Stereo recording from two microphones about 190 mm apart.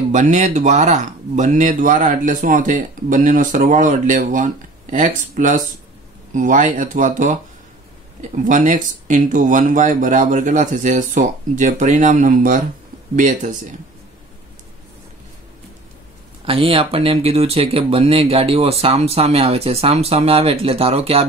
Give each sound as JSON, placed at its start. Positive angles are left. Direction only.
{"t": 0.1, "sound": "speech", "side_deg": -40}
{"t": 16.4, "sound": "speech", "side_deg": -30}